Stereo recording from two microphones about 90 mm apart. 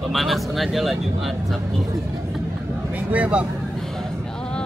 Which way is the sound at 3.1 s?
15° right (ahead or behind).